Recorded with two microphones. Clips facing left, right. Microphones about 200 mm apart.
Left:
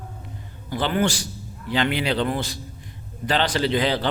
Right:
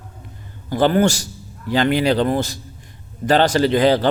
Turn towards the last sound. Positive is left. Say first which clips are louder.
# right 7 dB
turn(degrees=-45)  # may be behind; listen again after turning